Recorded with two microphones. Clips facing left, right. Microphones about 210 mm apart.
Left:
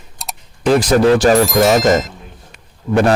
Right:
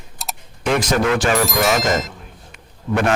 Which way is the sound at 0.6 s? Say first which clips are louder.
Left 7 dB; 35° left (ahead or behind).